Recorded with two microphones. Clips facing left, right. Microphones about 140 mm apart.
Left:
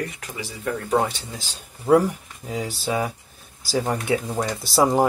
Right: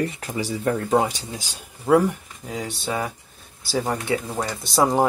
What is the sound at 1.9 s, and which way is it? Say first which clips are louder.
Speech: even; centre (ahead or behind).